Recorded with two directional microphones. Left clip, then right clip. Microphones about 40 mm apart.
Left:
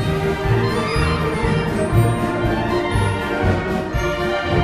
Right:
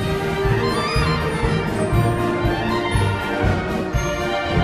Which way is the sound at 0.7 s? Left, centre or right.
Centre.